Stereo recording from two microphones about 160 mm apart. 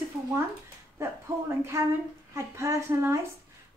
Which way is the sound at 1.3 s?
20° right (ahead or behind).